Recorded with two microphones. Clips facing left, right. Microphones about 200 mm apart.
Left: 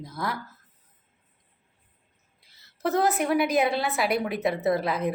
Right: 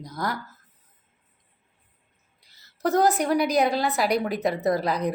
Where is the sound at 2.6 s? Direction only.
Centre (ahead or behind).